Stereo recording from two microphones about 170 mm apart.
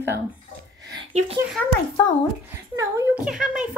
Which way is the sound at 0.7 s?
20° right (ahead or behind).